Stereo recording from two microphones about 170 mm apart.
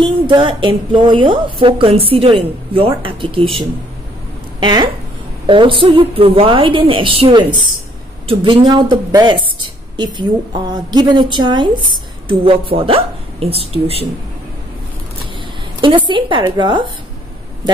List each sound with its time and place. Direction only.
0.0 s a woman's voice: 30° right (ahead or behind)
4.6 s a woman's voice: 25° right (ahead or behind)
15.8 s a woman's voice: 30° right (ahead or behind)